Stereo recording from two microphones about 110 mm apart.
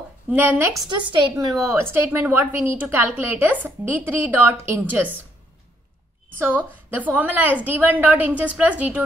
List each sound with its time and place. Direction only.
0.3 s a woman's voice: 15° right (ahead or behind)
0.8 s a woman's voice: 45° right (ahead or behind)
1.5 s a woman's voice: 25° right (ahead or behind)
6.3 s a woman's voice: 20° right (ahead or behind)